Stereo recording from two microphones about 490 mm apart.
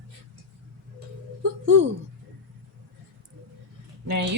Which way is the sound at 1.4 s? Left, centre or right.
Right.